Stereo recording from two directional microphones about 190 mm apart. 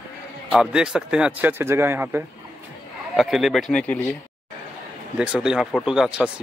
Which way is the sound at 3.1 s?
Centre (ahead or behind).